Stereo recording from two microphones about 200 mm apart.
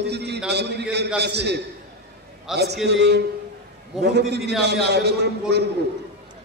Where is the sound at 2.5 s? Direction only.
Centre (ahead or behind).